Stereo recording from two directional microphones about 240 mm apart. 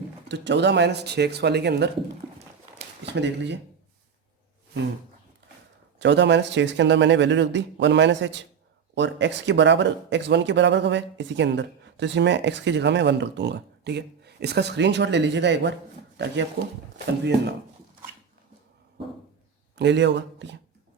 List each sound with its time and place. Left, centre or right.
0.3 s speech: right
2.7 s a sound: right
6.0 s speech: right
19.7 s speech: right